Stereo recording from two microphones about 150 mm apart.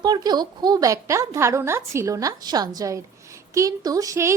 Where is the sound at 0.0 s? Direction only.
25° right (ahead or behind).